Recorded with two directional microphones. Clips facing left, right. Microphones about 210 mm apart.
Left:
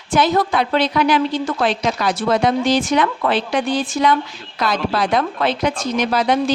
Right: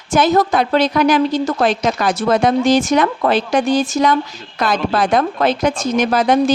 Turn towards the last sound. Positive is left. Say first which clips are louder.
# right 3 dB
turn(degrees=-45)  # may be behind; listen again after turning